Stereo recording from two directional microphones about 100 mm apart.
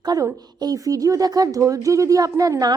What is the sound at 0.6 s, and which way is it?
A woman's voice, 35° right (ahead or behind).